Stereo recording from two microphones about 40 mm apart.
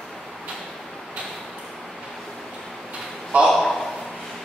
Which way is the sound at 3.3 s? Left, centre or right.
Right.